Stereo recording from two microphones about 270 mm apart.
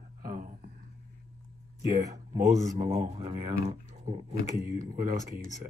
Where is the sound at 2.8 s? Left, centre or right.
Right.